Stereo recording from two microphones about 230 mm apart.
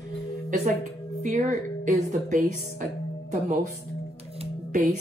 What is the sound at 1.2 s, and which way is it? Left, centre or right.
A woman's voice, right.